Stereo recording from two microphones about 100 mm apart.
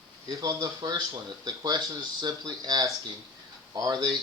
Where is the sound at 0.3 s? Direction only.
35° right (ahead or behind).